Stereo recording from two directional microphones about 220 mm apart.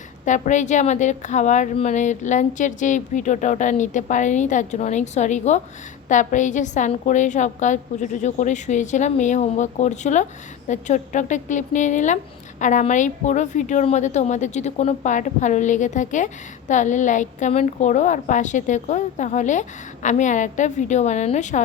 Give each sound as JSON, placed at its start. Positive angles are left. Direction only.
{"t": 0.3, "sound": "speech", "side_deg": 35}